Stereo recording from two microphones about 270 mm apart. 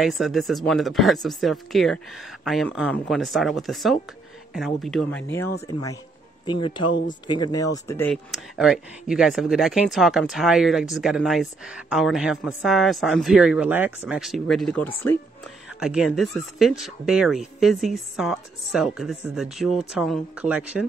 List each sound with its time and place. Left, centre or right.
0.0 s speech: centre
6.4 s speech: centre